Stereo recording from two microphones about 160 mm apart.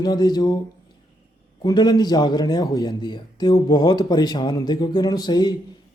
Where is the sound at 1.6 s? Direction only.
25° left (ahead or behind).